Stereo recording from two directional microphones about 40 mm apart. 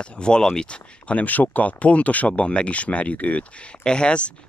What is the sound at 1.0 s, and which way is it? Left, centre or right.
Speech, left.